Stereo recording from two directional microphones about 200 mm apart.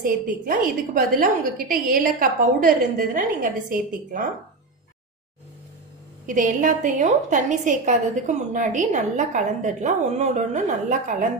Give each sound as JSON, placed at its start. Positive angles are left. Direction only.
{"t": 0.0, "sound": "a woman's voice", "side_deg": -45}
{"t": 6.2, "sound": "a woman's voice", "side_deg": -40}